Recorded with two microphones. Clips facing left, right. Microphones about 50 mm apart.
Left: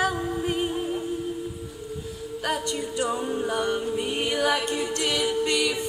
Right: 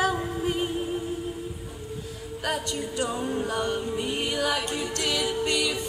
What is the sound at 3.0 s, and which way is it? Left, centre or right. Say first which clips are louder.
Music: left 1 dB; centre.